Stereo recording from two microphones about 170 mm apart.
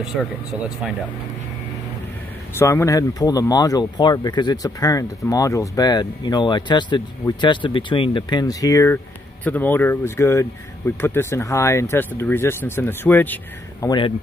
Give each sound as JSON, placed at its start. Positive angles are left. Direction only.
{"t": 0.1, "sound": "speech", "side_deg": -5}
{"t": 2.6, "sound": "speech", "side_deg": 15}
{"t": 13.8, "sound": "speech", "side_deg": 30}